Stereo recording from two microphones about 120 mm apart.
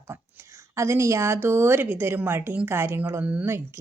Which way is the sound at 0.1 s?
15° right (ahead or behind).